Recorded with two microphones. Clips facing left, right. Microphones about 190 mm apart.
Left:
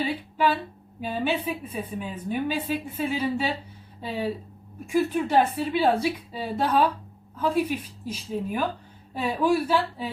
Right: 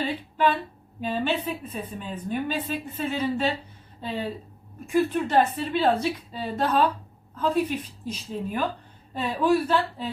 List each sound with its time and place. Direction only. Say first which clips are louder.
0.3 s a woman's voice: right 1 dB; 10° left (ahead or behind)